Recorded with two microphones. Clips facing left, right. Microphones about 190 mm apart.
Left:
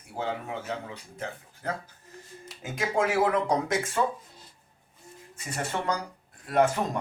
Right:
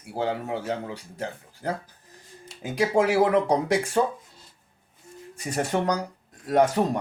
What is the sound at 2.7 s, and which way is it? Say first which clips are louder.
Speech: right 5 dB; 35° right (ahead or behind).